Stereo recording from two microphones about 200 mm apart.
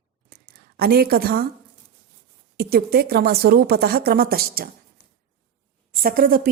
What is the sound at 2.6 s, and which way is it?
A woman's voice, 50° right (ahead or behind).